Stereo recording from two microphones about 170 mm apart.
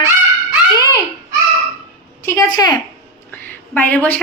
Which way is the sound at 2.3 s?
20° left (ahead or behind).